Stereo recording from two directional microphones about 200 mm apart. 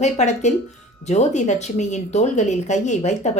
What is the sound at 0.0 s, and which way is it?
Speech, 35° left (ahead or behind).